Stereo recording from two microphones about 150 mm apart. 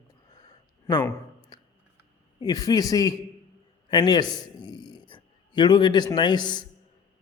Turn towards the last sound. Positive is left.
turn(degrees=30)  # may be behind; listen again after turning